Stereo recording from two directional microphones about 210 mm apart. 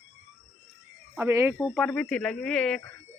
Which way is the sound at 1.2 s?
10° right (ahead or behind).